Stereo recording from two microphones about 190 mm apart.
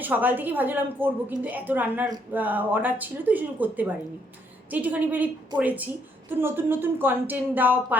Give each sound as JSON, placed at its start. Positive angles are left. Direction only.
{"t": 0.0, "sound": "a woman's voice", "side_deg": -10}